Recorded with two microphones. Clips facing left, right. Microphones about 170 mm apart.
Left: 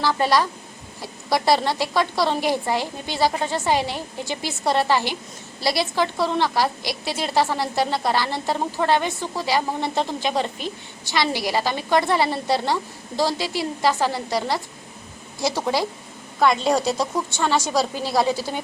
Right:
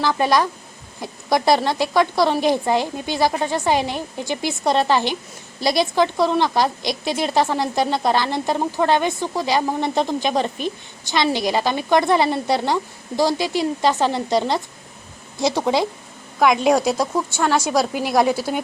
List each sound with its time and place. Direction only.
0.0 s speech: 15° right (ahead or behind)